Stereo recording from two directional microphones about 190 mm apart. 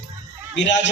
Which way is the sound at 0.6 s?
70° left (ahead or behind).